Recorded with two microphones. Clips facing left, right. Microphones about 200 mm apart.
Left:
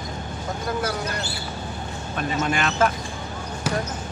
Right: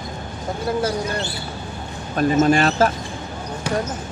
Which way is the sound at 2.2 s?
35° right (ahead or behind).